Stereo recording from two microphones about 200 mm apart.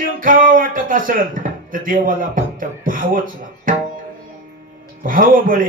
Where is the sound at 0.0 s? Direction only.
45° right (ahead or behind).